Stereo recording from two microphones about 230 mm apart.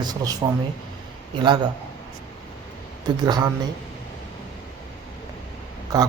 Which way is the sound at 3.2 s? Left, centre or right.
Centre.